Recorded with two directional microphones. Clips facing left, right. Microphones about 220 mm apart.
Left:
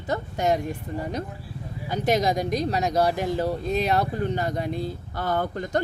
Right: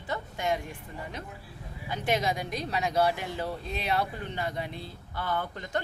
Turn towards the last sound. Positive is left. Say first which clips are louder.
# left 7 dB
turn(degrees=40)  # may be behind; listen again after turning